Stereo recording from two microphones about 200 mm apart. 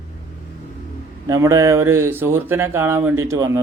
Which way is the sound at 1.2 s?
15° right (ahead or behind).